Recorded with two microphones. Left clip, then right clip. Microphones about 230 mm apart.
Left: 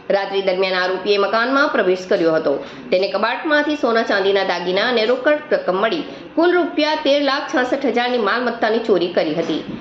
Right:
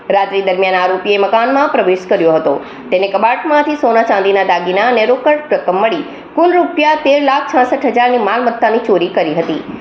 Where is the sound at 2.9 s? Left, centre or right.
Right.